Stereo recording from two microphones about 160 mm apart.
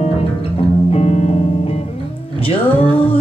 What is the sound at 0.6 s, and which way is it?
Music, 40° left (ahead or behind).